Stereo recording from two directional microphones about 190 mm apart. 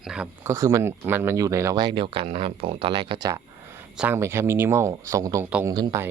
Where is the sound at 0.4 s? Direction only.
15° right (ahead or behind).